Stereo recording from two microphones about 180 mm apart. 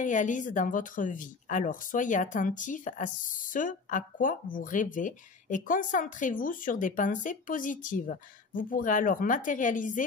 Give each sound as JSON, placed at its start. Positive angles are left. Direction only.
{"t": 0.0, "sound": "speech", "side_deg": 45}